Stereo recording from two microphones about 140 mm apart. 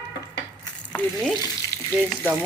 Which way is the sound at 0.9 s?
5° left (ahead or behind).